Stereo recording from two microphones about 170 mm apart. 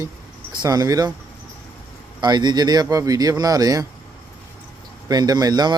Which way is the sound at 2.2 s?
25° right (ahead or behind).